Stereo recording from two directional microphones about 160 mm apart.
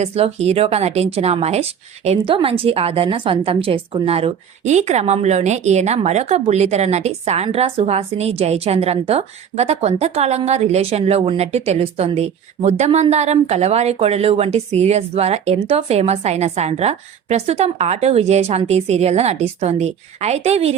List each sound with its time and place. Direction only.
0.0 s a woman's voice: 40° right (ahead or behind)